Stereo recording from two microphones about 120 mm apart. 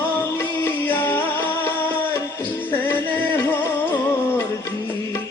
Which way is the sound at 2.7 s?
15° left (ahead or behind).